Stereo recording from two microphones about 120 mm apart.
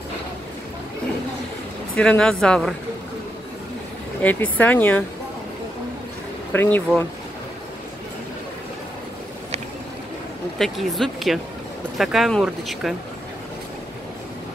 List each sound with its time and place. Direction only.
2.0 s speech: 5° left (ahead or behind)
4.2 s speech: 15° left (ahead or behind)
6.5 s speech: 20° left (ahead or behind)
10.6 s speech: centre (ahead or behind)